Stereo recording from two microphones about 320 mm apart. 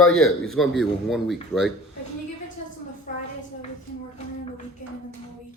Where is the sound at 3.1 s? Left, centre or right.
Left.